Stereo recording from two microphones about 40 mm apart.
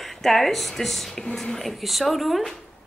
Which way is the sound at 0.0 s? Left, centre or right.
Centre.